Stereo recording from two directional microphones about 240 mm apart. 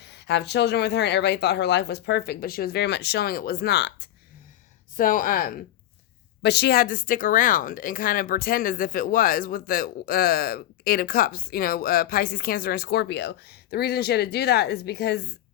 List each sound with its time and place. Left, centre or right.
0.0 s speech: left